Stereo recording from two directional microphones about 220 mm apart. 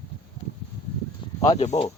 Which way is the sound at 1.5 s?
30° left (ahead or behind).